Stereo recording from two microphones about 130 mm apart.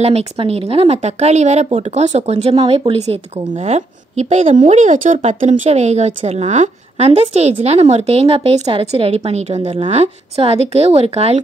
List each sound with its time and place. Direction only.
0.0 s speech: 50° right (ahead or behind); by 5.3 s 80° right
5.4 s a woman's voice: 60° right (ahead or behind)